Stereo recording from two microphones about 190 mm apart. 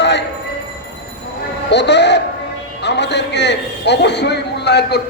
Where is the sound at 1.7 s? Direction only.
65° left (ahead or behind).